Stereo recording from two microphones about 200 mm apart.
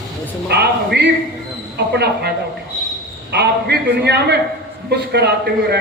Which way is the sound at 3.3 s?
55° right (ahead or behind).